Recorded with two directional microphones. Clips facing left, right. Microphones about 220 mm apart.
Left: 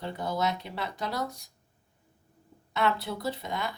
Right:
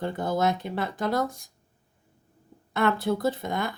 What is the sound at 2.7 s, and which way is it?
Speech, 50° right (ahead or behind).